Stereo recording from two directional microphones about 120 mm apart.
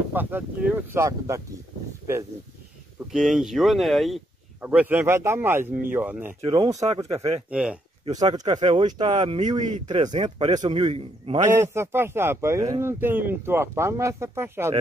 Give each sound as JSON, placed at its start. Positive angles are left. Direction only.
{"t": 0.1, "sound": "speech", "side_deg": -15}
{"t": 0.9, "sound": "speech", "side_deg": -25}
{"t": 3.1, "sound": "speech", "side_deg": -5}
{"t": 4.6, "sound": "speech", "side_deg": -15}
{"t": 6.4, "sound": "a man's voice", "side_deg": -45}
{"t": 7.4, "sound": "speech", "side_deg": -10}
{"t": 8.1, "sound": "speech", "side_deg": -35}
{"t": 10.1, "sound": "speech", "side_deg": -65}
{"t": 10.8, "sound": "a man's voice", "side_deg": -55}
{"t": 11.5, "sound": "speech", "side_deg": -20}
{"t": 13.0, "sound": "speech", "side_deg": -15}